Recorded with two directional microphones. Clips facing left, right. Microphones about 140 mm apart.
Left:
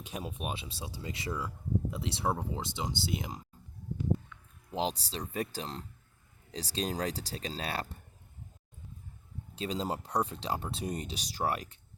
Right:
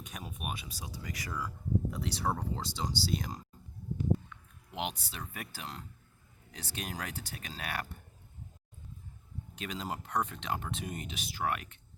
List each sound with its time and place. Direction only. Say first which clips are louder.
0.0 s speech: left 4 dB; 30° left (ahead or behind)
4.7 s speech: left 5 dB; 30° left (ahead or behind)
9.6 s speech: left 5 dB; 30° left (ahead or behind)